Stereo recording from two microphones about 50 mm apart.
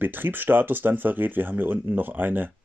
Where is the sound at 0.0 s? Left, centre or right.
Right.